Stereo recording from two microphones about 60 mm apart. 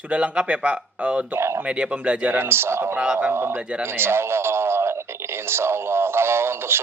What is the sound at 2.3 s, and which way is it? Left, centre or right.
A man's voice, right.